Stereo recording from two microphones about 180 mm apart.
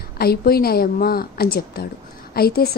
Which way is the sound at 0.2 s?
60° left (ahead or behind).